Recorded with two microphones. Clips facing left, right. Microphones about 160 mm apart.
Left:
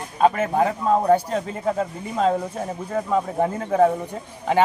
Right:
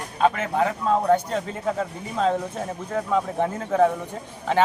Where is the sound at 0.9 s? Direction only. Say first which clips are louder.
Left 2 dB; 10° left (ahead or behind).